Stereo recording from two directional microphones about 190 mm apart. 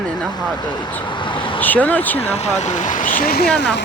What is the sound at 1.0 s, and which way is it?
Vehicle, 25° left (ahead or behind).